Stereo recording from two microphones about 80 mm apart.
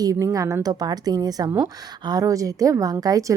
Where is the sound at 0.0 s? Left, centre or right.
Right.